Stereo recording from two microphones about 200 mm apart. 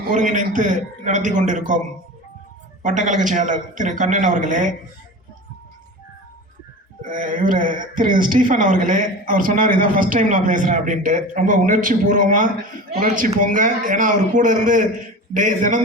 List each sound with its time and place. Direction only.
0.1 s speech: 40° right (ahead or behind)
2.8 s speech: 40° right (ahead or behind)
7.0 s speech: 40° right (ahead or behind)